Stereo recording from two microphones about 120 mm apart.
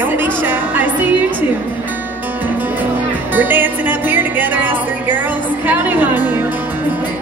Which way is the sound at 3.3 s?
15° right (ahead or behind).